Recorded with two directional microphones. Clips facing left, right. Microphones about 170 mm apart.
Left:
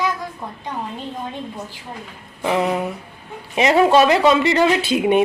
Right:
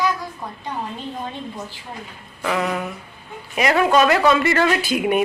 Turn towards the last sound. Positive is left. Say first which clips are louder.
# left 3 dB
turn(degrees=25)  # may be behind; listen again after turning